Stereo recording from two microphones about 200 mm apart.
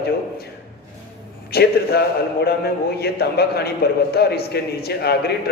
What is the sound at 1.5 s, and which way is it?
A man's voice, 50° left (ahead or behind).